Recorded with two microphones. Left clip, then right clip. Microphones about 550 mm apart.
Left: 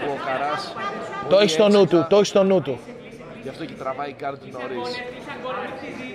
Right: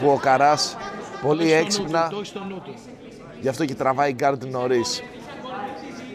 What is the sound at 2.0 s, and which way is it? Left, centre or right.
Speech, left.